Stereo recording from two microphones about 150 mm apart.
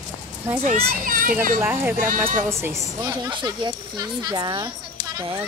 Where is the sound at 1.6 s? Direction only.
15° right (ahead or behind).